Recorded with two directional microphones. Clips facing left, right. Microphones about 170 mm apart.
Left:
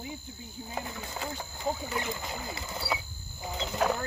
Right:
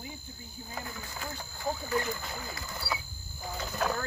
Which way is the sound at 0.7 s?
20° left (ahead or behind).